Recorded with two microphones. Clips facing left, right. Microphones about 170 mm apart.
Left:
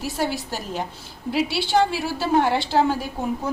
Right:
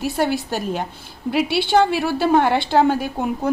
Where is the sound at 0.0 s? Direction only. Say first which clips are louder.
Right 5 dB; 60° right (ahead or behind).